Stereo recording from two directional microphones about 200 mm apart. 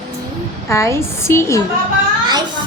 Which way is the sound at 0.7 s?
15° left (ahead or behind).